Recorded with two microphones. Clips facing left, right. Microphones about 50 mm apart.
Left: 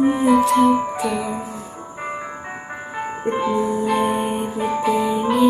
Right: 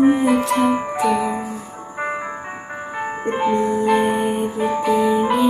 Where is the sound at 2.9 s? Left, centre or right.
Centre.